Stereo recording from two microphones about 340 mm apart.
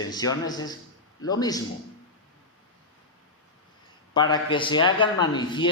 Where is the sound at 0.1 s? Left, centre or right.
Centre.